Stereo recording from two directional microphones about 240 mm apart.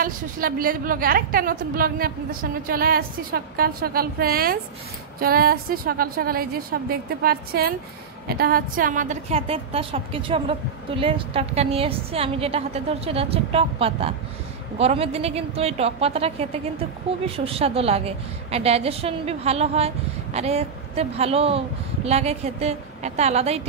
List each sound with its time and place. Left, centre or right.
0.0 s a woman's voice: right